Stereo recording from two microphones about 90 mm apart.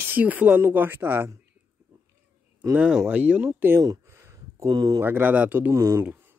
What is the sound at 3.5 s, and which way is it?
Speech, 25° right (ahead or behind).